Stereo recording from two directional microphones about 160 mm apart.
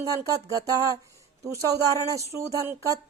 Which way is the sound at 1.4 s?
20° right (ahead or behind).